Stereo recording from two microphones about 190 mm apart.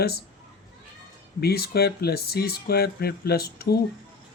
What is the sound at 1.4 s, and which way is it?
Speech, 55° left (ahead or behind).